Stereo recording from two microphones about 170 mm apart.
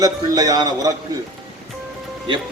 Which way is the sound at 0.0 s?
20° right (ahead or behind).